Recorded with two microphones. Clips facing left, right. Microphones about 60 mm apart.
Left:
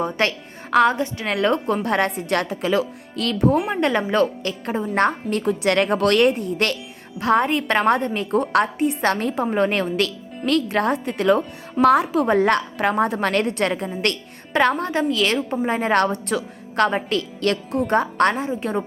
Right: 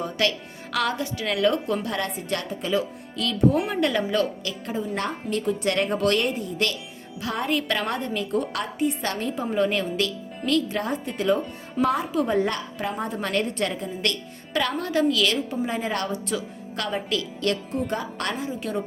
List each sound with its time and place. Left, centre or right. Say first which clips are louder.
0.0 s a woman's voice: left 3 dB; left
3.7 s speech: left 3 dB; left
4.6 s a woman's voice: left 8 dB; left
7.2 s a woman's voice: left 8 dB; left